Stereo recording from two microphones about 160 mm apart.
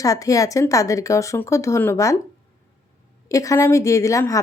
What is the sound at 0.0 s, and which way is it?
A woman's voice, 20° left (ahead or behind).